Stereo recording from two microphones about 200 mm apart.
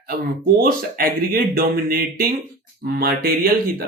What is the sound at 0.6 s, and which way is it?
Speech, 45° right (ahead or behind).